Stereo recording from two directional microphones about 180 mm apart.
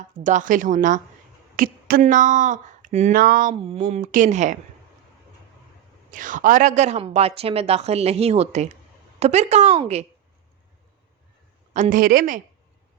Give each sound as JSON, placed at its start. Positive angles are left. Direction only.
{"t": 0.2, "sound": "speech", "side_deg": -45}
{"t": 3.5, "sound": "a woman's voice", "side_deg": -30}
{"t": 4.0, "sound": "speech", "side_deg": -45}
{"t": 6.1, "sound": "a woman's voice", "side_deg": -45}
{"t": 11.7, "sound": "speech", "side_deg": -45}